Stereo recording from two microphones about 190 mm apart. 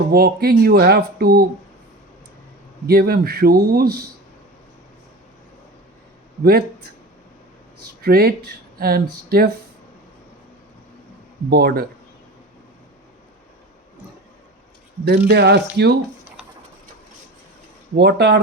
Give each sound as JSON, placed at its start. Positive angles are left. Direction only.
{"t": 0.1, "sound": "speech", "side_deg": -55}
{"t": 2.8, "sound": "speech", "side_deg": -55}
{"t": 6.4, "sound": "speech", "side_deg": -55}
{"t": 8.0, "sound": "speech", "side_deg": -55}
{"t": 11.4, "sound": "speech", "side_deg": -55}
{"t": 15.3, "sound": "speech", "side_deg": -60}
{"t": 17.9, "sound": "speech", "side_deg": -65}